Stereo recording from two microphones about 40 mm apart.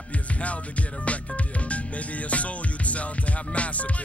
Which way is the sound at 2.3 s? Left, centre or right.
Left.